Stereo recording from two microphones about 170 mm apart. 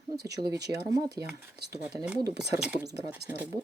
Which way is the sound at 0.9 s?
20° right (ahead or behind).